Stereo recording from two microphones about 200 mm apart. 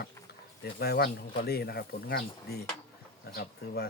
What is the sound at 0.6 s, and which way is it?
Speech, 50° left (ahead or behind).